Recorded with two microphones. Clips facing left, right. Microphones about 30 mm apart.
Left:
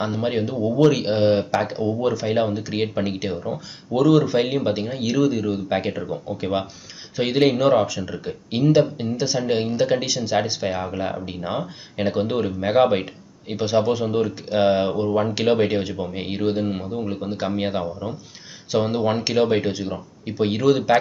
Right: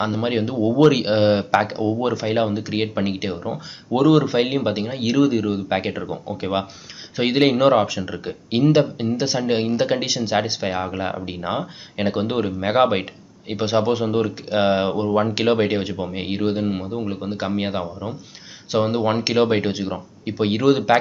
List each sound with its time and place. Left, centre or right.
0.0 s speech: centre